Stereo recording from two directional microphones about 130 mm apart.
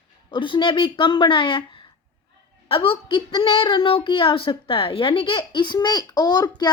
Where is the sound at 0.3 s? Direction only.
40° left (ahead or behind).